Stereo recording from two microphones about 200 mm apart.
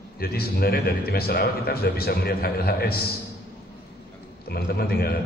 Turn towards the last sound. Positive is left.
turn(degrees=50)  # may be behind; listen again after turning